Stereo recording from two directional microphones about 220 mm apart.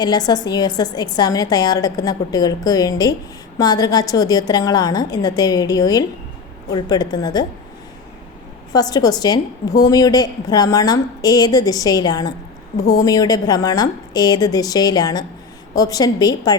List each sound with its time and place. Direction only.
0.0 s a woman's voice: 20° left (ahead or behind)
8.7 s a woman's voice: 15° left (ahead or behind)